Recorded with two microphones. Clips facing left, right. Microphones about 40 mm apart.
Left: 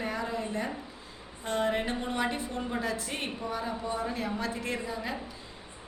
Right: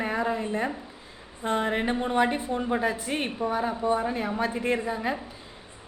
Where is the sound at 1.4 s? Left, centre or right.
Right.